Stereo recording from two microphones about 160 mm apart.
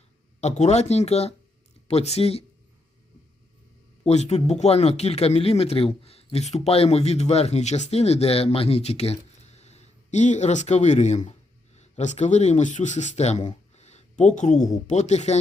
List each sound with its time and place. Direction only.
0.4 s speech: 45° left (ahead or behind)
4.0 s speech: 45° left (ahead or behind)
13.5 s a sound: 45° left (ahead or behind)
14.8 s speech: 45° left (ahead or behind)